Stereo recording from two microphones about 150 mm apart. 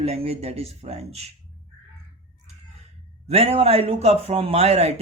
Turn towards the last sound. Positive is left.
turn(degrees=-45)  # may be behind; listen again after turning